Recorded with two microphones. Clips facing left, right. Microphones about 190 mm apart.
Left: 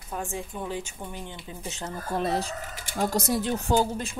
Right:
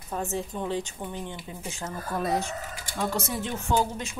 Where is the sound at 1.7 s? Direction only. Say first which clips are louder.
Left 2 dB; 25° left (ahead or behind).